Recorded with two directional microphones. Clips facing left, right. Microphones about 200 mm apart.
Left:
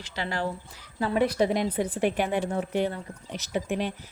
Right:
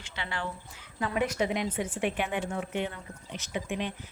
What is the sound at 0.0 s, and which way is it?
Speech, 40° left (ahead or behind).